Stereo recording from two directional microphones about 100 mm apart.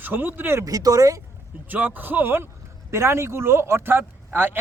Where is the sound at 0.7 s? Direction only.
40° right (ahead or behind).